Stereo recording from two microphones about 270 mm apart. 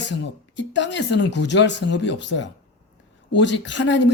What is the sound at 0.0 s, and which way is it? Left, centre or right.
Speech, left.